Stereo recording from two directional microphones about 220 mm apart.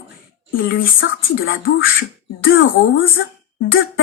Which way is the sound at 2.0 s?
65° left (ahead or behind).